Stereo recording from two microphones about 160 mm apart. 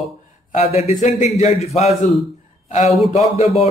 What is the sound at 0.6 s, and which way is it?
Speech, 40° left (ahead or behind).